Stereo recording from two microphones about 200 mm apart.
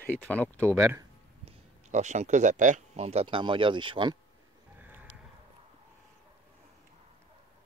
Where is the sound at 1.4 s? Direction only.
35° right (ahead or behind).